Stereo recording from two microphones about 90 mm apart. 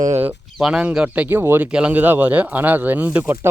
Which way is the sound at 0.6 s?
10° right (ahead or behind).